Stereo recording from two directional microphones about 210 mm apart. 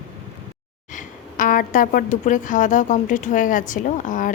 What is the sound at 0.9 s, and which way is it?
A woman's voice, 40° left (ahead or behind).